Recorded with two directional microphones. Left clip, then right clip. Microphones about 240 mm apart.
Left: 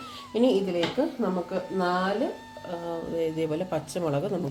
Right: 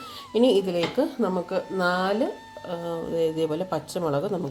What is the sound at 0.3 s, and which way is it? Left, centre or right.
Speech, right.